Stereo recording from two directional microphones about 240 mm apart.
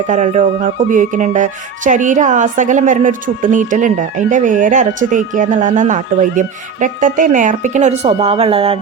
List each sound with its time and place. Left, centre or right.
0.1 s music: right
0.9 s a woman's voice: right